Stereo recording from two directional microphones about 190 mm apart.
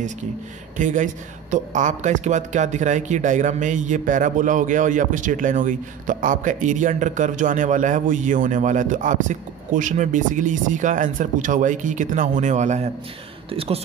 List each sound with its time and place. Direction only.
0.7 s speech: 40° right (ahead or behind)